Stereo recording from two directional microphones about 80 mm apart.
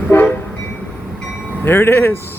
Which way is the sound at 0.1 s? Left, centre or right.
Left.